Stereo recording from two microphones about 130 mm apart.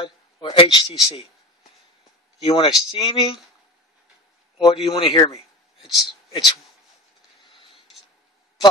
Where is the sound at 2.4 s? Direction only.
40° left (ahead or behind).